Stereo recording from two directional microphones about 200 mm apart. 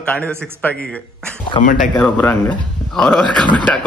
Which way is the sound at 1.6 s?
40° left (ahead or behind).